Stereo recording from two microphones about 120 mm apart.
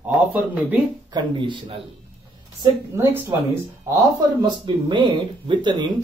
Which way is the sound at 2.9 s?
25° right (ahead or behind).